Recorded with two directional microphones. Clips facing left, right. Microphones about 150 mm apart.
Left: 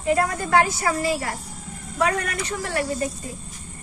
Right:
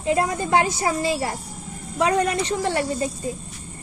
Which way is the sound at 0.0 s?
20° right (ahead or behind).